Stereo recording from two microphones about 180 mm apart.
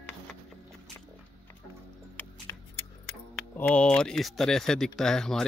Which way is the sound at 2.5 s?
15° left (ahead or behind).